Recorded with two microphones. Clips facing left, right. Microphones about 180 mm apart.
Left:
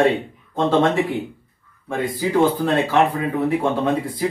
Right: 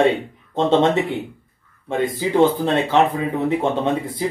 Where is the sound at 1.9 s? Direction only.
25° right (ahead or behind).